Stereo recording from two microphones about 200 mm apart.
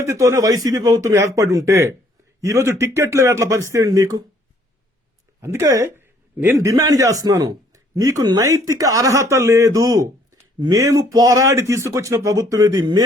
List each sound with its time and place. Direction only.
0.0 s speech: 15° right (ahead or behind)
5.4 s speech: 15° right (ahead or behind)